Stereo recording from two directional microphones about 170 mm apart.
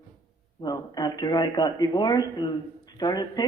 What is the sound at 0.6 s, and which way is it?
A man's voice, 25° left (ahead or behind).